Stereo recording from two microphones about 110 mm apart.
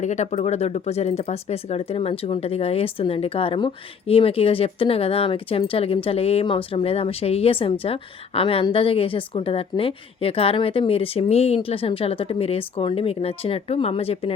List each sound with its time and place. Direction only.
0.0 s speech: 90° left; by 6.4 s 65° left (ahead or behind)
6.4 s speech: 55° left (ahead or behind)